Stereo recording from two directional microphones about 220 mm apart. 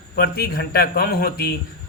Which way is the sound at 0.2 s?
45° left (ahead or behind).